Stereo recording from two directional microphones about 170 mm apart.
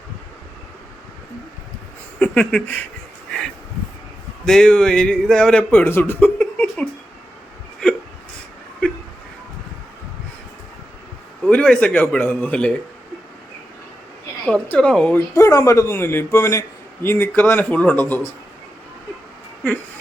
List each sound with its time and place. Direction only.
2.1 s speech: 5° left (ahead or behind)
4.4 s speech: 5° left (ahead or behind)
11.4 s a man's voice: 5° left (ahead or behind)
14.4 s speech: 5° left (ahead or behind)
15.4 s a man's voice: 20° left (ahead or behind)